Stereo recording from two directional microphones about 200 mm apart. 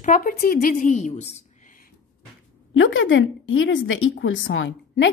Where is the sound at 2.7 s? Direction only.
70° left (ahead or behind).